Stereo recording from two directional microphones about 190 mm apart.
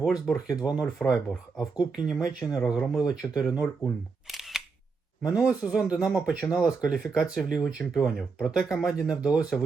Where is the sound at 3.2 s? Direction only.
10° left (ahead or behind).